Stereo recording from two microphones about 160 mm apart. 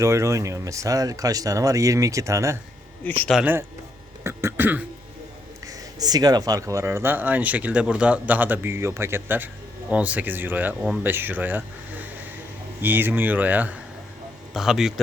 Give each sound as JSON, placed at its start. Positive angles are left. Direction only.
{"t": 0.0, "sound": "speech", "side_deg": -20}
{"t": 3.0, "sound": "speech", "side_deg": 10}
{"t": 4.2, "sound": "speech", "side_deg": -15}
{"t": 6.0, "sound": "speech", "side_deg": -25}